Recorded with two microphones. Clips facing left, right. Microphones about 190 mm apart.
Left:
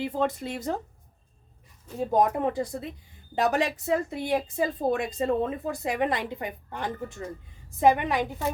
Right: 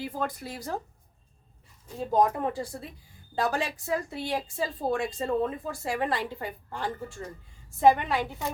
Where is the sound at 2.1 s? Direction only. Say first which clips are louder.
Left 1 dB; 20° left (ahead or behind).